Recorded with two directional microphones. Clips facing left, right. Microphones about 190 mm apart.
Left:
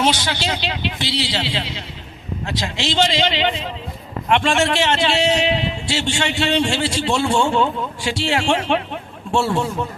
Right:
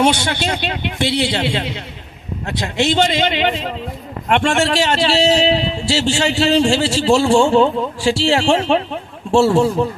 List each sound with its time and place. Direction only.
0.4 s a man's voice: 55° right (ahead or behind); by 9.7 s 30° right (ahead or behind)